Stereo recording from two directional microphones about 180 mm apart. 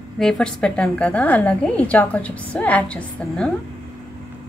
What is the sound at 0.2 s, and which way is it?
A woman's voice, 5° left (ahead or behind).